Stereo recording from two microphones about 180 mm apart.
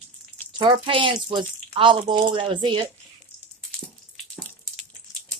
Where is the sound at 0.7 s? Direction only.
30° right (ahead or behind).